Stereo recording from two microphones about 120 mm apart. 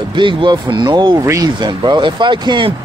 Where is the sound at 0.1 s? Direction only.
40° right (ahead or behind).